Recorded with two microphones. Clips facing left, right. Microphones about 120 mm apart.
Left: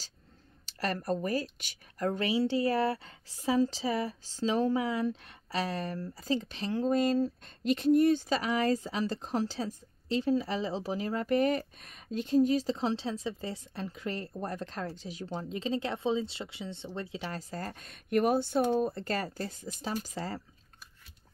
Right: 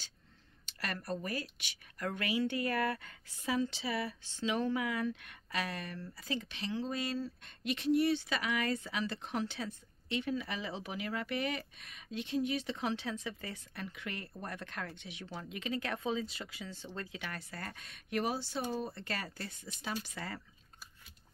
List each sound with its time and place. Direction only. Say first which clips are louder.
0.7 s speech: left 7 dB; 40° left (ahead or behind)